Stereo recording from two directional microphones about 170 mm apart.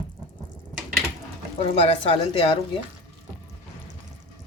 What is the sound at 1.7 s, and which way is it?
Speech, 35° left (ahead or behind).